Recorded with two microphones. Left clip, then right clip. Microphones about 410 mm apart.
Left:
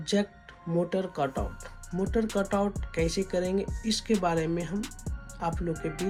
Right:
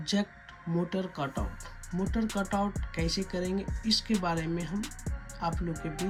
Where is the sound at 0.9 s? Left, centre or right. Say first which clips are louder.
Left 5 dB; centre.